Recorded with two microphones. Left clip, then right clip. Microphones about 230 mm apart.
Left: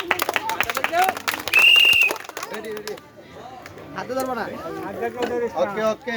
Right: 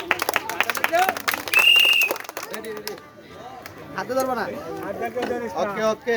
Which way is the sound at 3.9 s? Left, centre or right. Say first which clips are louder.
Right 2 dB; right.